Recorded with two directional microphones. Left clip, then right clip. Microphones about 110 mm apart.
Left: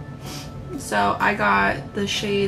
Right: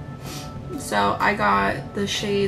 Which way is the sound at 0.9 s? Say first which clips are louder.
Even; 15° right (ahead or behind).